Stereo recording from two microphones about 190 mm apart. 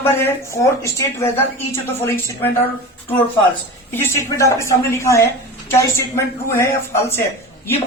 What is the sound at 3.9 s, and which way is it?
A woman's voice, 15° left (ahead or behind).